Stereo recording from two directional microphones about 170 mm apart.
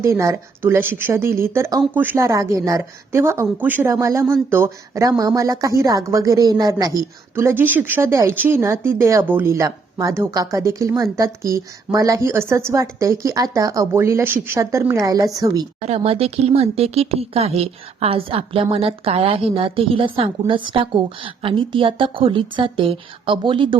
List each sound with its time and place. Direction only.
0.0 s a woman's voice: 15° right (ahead or behind)
15.8 s speech: 40° right (ahead or behind)